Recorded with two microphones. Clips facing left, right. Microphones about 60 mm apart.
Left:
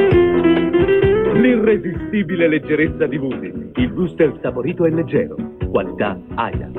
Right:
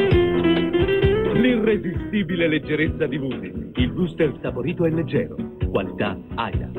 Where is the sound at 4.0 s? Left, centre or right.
Centre.